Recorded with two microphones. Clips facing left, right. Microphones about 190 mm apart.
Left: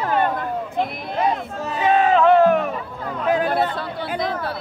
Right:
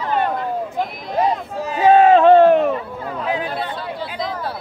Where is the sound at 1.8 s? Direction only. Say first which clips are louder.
Right 5 dB; 35° right (ahead or behind).